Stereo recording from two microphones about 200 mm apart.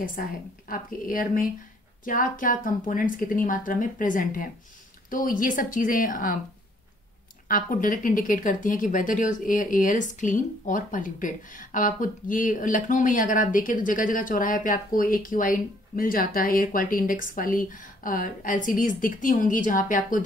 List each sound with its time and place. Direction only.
0.2 s speech: 45° left (ahead or behind)
7.4 s speech: 45° left (ahead or behind)